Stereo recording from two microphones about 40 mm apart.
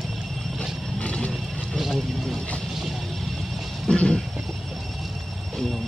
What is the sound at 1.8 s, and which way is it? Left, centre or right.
Vehicle, centre.